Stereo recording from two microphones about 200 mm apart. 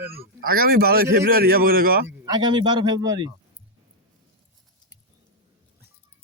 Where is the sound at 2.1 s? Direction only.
20° right (ahead or behind).